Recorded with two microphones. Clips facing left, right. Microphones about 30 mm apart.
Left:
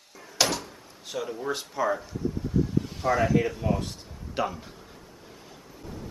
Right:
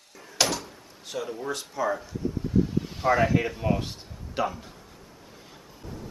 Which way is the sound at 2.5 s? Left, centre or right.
Centre.